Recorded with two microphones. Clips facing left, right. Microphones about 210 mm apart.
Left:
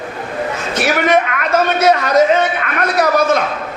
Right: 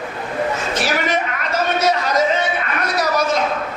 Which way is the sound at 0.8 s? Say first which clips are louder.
Left 9 dB; 55° left (ahead or behind).